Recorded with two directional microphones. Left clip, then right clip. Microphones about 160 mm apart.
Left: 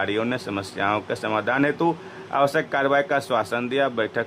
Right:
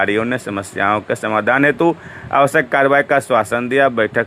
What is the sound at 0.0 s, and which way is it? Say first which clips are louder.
Speech: right 7 dB; 20° right (ahead or behind).